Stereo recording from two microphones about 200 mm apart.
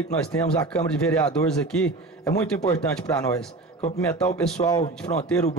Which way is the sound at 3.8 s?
35° left (ahead or behind).